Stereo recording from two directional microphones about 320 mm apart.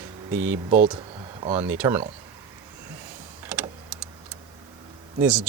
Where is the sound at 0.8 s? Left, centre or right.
Centre.